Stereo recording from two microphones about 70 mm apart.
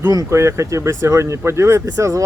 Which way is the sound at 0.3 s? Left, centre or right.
Right.